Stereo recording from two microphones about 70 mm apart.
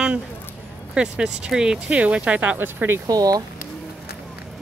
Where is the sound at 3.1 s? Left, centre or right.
Right.